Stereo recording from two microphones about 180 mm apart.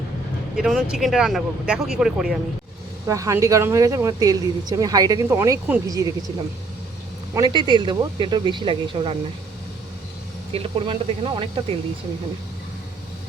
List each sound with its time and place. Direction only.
0.5 s speech: centre (ahead or behind)
3.1 s speech: 15° right (ahead or behind)
7.3 s speech: 25° right (ahead or behind)
10.5 s speech: 30° right (ahead or behind)